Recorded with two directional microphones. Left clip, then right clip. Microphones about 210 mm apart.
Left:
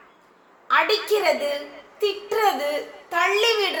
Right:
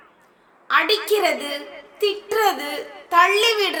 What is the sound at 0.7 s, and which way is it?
A woman's voice, 45° right (ahead or behind).